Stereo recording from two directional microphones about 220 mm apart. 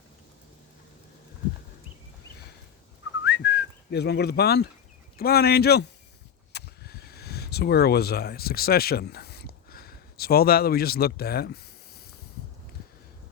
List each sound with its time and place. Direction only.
3.2 s whistling: 50° left (ahead or behind)
5.1 s a man's voice: 45° left (ahead or behind)